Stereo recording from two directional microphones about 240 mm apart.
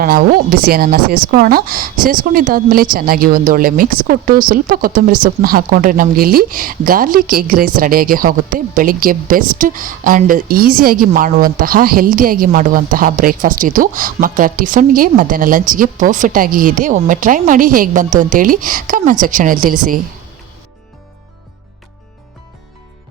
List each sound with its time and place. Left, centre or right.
0.0 s a woman's voice: right